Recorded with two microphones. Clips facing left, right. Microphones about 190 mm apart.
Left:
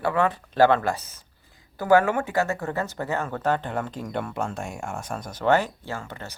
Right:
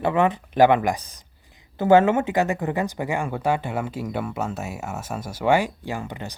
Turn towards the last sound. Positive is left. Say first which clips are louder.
# right 4 dB
turn(degrees=-15)  # may be behind; listen again after turning